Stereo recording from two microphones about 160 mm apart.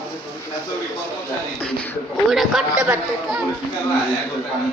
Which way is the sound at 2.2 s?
Centre (ahead or behind).